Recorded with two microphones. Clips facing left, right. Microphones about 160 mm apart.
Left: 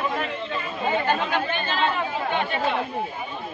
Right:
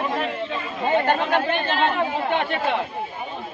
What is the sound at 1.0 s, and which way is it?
Speech, 60° right (ahead or behind).